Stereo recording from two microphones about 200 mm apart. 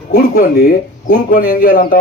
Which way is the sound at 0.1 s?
50° left (ahead or behind).